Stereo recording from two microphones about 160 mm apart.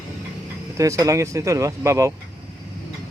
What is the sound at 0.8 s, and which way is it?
Speech, 20° right (ahead or behind).